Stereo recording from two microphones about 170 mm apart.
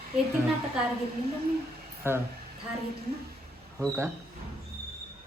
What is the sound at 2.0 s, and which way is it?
Speech, 15° right (ahead or behind).